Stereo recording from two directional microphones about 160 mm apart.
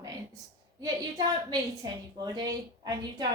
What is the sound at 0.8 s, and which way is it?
A woman's voice, 25° right (ahead or behind).